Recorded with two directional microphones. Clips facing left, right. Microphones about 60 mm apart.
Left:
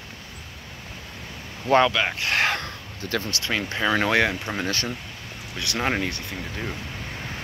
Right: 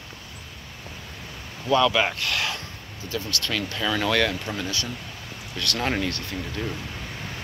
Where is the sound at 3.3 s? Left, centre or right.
Left.